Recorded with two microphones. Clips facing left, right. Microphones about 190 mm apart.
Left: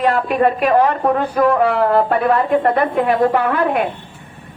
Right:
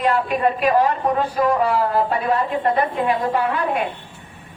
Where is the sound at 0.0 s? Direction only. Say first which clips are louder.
Left 4 dB; 50° left (ahead or behind).